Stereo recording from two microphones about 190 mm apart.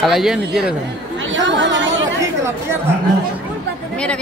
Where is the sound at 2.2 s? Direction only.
15° right (ahead or behind).